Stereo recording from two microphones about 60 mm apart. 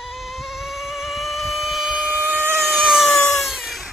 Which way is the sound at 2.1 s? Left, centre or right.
Right.